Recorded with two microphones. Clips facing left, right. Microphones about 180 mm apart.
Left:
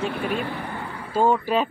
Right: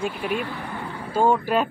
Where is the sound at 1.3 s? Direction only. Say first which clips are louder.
Even; 5° right (ahead or behind).